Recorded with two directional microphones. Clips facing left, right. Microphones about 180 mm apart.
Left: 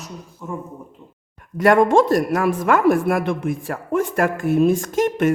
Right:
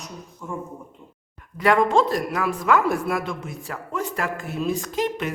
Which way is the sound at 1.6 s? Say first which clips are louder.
Left 5 dB; 50° left (ahead or behind).